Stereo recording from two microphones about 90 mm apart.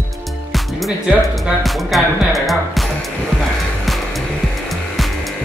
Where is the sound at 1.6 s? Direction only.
Centre (ahead or behind).